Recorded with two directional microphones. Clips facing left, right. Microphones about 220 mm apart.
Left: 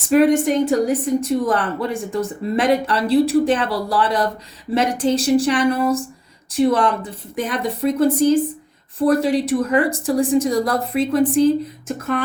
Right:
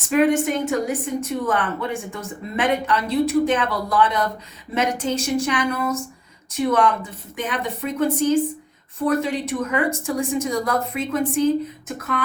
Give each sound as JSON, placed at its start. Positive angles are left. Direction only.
{"t": 0.1, "sound": "a woman's voice", "side_deg": 35}